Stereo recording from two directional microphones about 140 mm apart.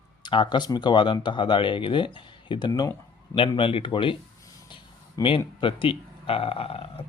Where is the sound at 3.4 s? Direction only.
40° left (ahead or behind).